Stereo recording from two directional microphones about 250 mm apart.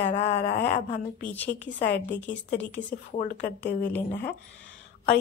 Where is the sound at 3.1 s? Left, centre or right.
Left.